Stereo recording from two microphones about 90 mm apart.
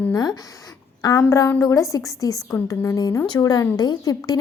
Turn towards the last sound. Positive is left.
turn(degrees=45)  # may be behind; listen again after turning